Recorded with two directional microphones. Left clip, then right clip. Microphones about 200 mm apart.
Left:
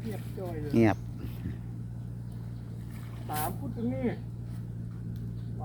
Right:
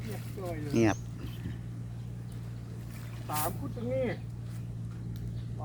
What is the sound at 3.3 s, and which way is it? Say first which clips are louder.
Speech: even; 10° right (ahead or behind).